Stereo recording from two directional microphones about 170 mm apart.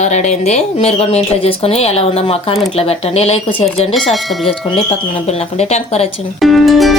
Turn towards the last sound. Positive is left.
turn(degrees=0)  # may be behind; listen again after turning